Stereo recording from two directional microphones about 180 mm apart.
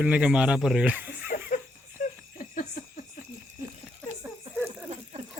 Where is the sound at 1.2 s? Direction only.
50° left (ahead or behind).